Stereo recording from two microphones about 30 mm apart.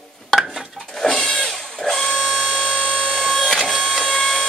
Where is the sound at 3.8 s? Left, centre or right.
Centre.